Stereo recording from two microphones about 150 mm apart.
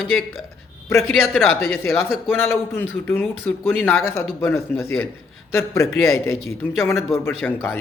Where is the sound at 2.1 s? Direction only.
5° right (ahead or behind).